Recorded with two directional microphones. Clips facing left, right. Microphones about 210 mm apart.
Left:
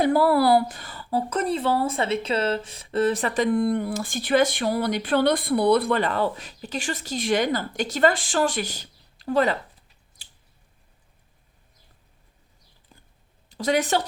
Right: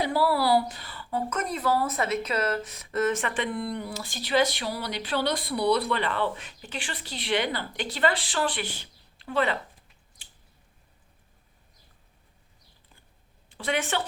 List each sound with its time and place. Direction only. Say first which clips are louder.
0.0 s a woman's voice: left 6 dB; 50° left (ahead or behind)
13.5 s a woman's voice: left 6 dB; 40° left (ahead or behind)